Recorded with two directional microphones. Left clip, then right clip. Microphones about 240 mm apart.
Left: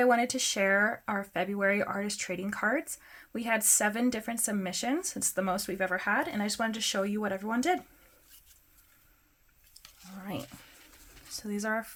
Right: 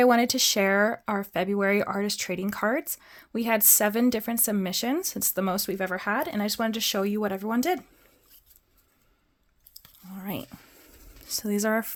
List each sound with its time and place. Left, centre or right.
0.0 s speech: right
9.7 s squish: right
11.3 s speech: right